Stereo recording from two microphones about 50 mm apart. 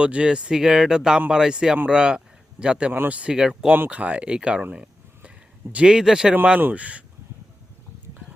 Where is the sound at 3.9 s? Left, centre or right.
Right.